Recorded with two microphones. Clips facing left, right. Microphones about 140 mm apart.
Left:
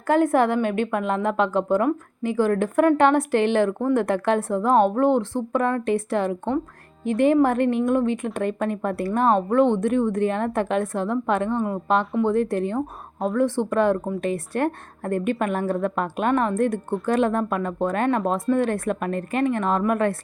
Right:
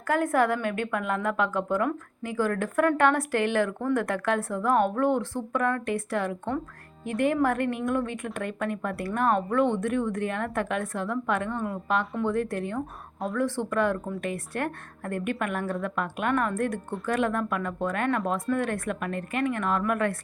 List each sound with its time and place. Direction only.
0.1 s speech: 25° left (ahead or behind)